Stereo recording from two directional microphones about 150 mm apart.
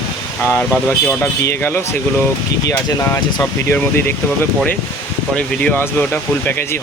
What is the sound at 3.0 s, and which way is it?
Speech, 20° left (ahead or behind).